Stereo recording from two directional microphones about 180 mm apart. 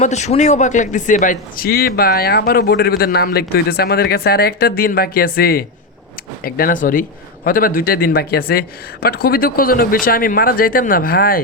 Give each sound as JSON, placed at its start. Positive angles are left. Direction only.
{"t": 0.0, "sound": "a man's voice", "side_deg": 40}